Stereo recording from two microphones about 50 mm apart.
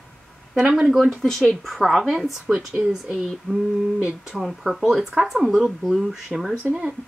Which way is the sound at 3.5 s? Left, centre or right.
Centre.